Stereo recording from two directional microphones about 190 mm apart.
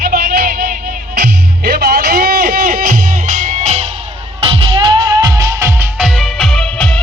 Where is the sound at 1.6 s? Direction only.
55° right (ahead or behind).